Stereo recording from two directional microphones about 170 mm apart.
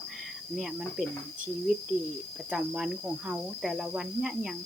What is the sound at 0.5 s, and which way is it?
Cricket, centre (ahead or behind).